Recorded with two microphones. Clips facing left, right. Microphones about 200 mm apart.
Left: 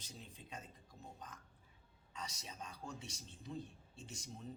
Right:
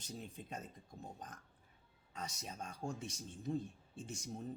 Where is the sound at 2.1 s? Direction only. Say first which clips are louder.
Right 3 dB; 50° right (ahead or behind).